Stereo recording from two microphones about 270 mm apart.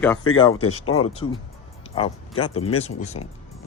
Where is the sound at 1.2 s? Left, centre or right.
Centre.